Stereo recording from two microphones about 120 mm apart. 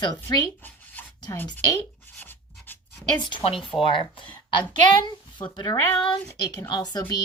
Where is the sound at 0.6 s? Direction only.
15° left (ahead or behind).